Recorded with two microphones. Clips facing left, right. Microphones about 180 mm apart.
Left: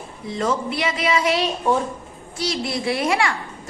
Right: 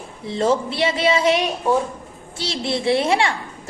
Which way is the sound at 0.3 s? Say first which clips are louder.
Right 4 dB; 30° right (ahead or behind).